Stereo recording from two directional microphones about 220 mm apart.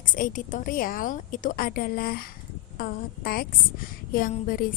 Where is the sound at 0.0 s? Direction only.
35° left (ahead or behind).